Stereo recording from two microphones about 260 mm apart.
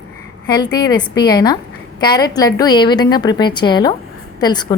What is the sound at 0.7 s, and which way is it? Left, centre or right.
A woman's voice, centre.